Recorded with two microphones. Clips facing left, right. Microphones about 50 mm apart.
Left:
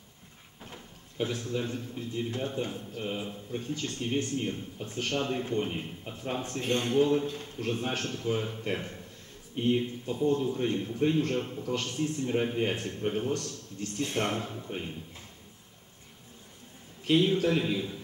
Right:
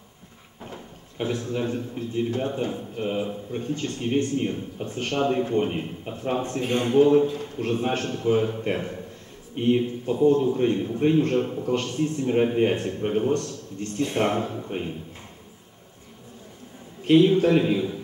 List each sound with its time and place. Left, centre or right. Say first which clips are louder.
1.1 s a man's voice: right 4 dB; right
7.0 s a man's voice: right 10 dB; right
17.0 s a man's voice: right 8 dB; right